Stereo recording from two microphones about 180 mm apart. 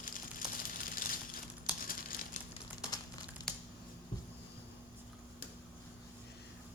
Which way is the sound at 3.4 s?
20° left (ahead or behind).